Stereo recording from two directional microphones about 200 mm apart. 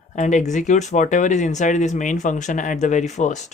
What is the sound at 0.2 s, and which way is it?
Speech, 35° left (ahead or behind).